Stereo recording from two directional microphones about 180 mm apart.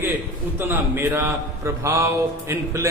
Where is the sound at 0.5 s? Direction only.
15° right (ahead or behind).